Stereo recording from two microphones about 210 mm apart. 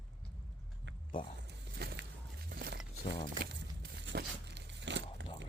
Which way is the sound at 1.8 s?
50° right (ahead or behind).